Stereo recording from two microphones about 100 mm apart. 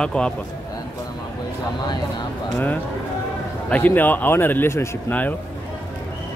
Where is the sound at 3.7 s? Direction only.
20° left (ahead or behind).